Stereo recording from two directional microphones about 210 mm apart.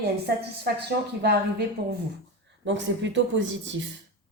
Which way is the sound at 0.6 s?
50° right (ahead or behind).